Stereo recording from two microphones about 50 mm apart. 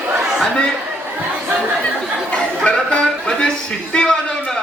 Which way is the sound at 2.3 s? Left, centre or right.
Centre.